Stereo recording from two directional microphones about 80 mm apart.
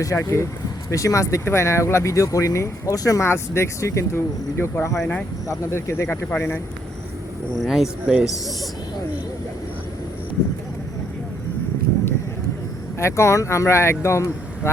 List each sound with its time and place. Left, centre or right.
0.0 s speech: left
3.2 s speech: left
7.6 s speech: centre
13.0 s speech: left